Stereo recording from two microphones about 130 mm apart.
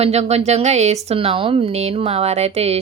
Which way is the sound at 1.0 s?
45° right (ahead or behind).